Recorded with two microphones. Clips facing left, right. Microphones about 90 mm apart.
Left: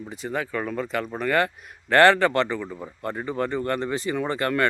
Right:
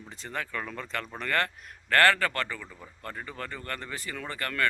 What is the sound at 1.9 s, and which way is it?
Speech, 20° left (ahead or behind).